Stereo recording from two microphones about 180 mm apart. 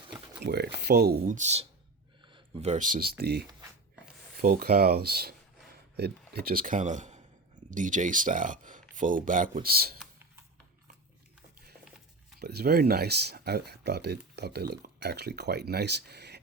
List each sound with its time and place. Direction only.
0.4 s speech: 65° right (ahead or behind)
12.4 s speech: 60° right (ahead or behind)